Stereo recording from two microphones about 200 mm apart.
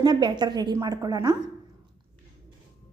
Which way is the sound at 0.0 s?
20° right (ahead or behind).